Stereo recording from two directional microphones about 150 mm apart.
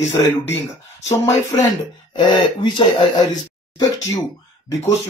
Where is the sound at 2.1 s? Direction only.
30° left (ahead or behind).